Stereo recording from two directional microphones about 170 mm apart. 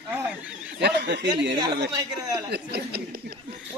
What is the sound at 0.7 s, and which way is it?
Speech, 80° right.